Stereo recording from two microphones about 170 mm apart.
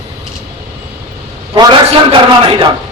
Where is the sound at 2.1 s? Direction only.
30° right (ahead or behind).